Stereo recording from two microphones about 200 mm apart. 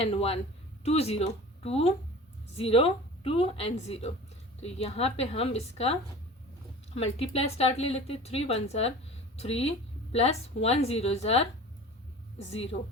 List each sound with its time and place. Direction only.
0.0 s a woman's voice: 30° left (ahead or behind)
12.5 s a woman's voice: 30° left (ahead or behind)